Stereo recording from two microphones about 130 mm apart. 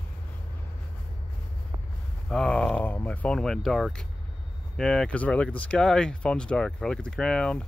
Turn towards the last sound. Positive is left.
turn(degrees=5)  # may be behind; listen again after turning